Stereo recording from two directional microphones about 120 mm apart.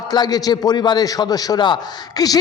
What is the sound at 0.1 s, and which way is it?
A man's voice, 35° left (ahead or behind).